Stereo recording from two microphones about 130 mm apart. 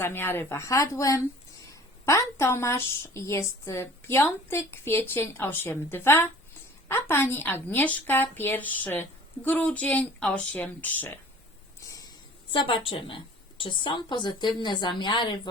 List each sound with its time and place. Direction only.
0.0 s a woman's voice: 15° left (ahead or behind)
11.8 s a sound: 25° left (ahead or behind)
12.5 s a woman's voice: 40° left (ahead or behind)